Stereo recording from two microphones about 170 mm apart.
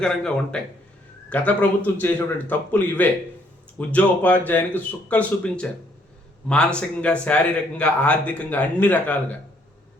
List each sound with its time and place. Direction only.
0.0 s speech: 5° left (ahead or behind)